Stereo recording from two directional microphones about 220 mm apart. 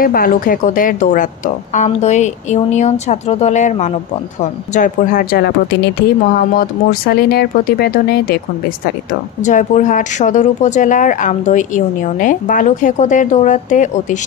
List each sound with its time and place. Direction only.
0.0 s speech: 40° left (ahead or behind)
9.4 s speech: 35° left (ahead or behind)